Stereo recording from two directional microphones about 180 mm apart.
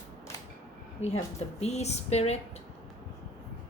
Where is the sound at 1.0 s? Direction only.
35° left (ahead or behind).